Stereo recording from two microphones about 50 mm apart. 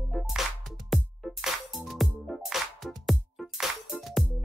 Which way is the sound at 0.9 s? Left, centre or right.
Centre.